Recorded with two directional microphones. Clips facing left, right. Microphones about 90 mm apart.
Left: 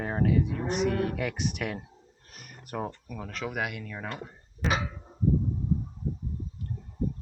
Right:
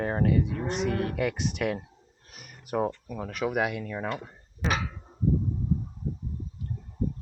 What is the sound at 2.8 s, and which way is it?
Speech, 20° right (ahead or behind).